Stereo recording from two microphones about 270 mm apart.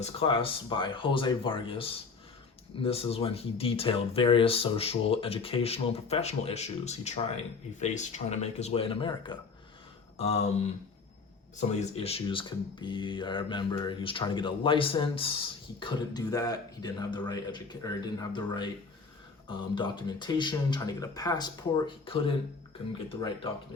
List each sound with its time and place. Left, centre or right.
0.0 s speech: left
11.8 s speech: left